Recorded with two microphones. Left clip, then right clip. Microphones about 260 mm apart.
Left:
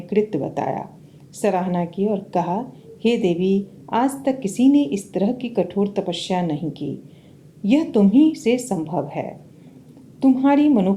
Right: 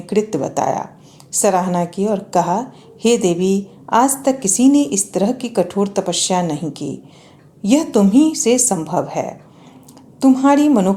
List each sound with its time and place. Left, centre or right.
0.0 s a woman's voice: right